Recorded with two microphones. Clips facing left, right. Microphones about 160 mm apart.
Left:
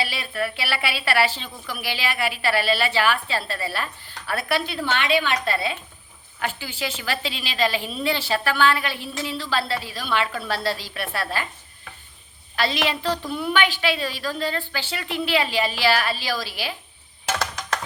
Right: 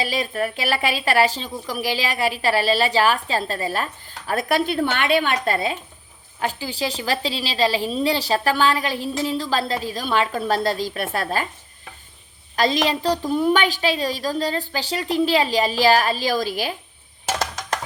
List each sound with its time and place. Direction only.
0.0 s a woman's voice: 40° right (ahead or behind)
12.5 s a woman's voice: 40° right (ahead or behind)